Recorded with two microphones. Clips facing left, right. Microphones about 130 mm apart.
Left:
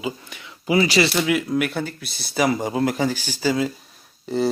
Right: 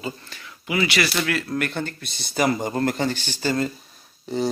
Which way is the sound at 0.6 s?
35° left (ahead or behind).